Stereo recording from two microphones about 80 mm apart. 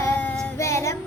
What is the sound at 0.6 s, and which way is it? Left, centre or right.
Music, left.